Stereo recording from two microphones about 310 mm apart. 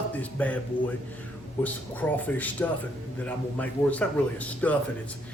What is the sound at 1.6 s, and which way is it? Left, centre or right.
A man's voice, centre.